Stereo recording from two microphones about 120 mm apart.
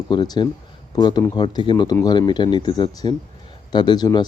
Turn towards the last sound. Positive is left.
turn(degrees=35)  # may be behind; listen again after turning